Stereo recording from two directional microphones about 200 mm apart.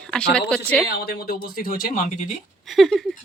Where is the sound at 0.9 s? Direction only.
50° left (ahead or behind).